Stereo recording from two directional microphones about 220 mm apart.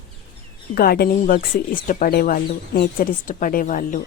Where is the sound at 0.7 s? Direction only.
45° left (ahead or behind).